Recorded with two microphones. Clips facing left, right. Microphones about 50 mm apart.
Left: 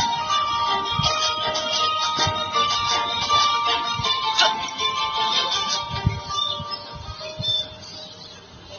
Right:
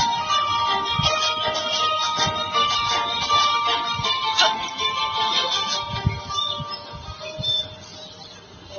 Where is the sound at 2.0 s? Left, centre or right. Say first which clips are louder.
Even; right.